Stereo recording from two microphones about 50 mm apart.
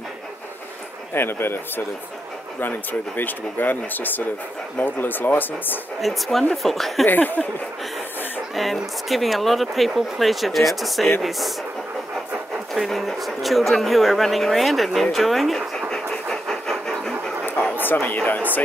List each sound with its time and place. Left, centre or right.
1.1 s speech: left
2.6 s speech: left
5.9 s speech: centre
7.1 s speech: left
8.5 s speech: centre
12.7 s speech: centre
15.9 s vehicle: centre
18.0 s speech: left